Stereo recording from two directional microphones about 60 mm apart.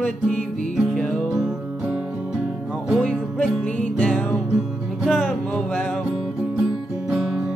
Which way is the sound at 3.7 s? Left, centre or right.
Left.